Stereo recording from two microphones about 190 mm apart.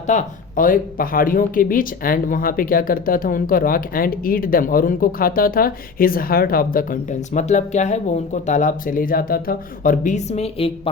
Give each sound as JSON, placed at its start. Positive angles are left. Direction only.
{"t": 0.1, "sound": "speech", "side_deg": 45}